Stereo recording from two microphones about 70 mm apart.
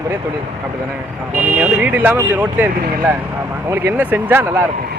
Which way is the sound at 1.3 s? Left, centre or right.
Right.